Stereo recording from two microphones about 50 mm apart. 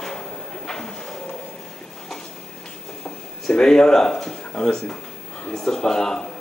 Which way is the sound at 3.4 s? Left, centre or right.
Centre.